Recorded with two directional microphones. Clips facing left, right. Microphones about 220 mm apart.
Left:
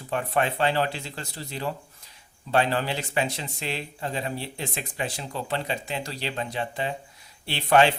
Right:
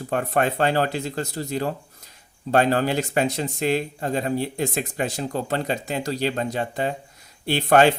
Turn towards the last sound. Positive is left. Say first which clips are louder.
# right 4 dB
turn(degrees=-45)  # may be behind; listen again after turning